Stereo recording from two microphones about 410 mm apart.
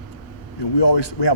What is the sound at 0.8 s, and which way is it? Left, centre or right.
Speech, left.